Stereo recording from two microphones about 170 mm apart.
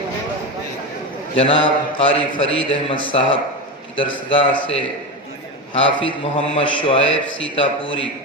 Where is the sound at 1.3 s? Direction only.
35° left (ahead or behind).